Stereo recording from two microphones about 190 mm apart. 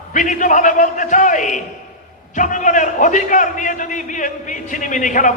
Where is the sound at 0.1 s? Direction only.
40° left (ahead or behind).